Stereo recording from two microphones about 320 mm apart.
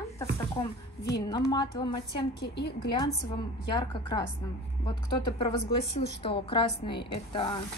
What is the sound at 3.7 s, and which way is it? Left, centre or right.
Speech, centre.